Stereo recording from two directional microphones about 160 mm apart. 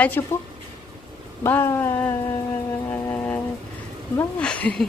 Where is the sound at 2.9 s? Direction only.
10° left (ahead or behind).